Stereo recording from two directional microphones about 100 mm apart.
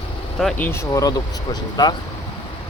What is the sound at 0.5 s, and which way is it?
Speech, 15° left (ahead or behind).